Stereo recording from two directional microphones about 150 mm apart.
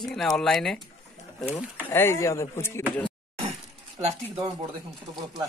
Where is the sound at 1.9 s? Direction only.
15° left (ahead or behind).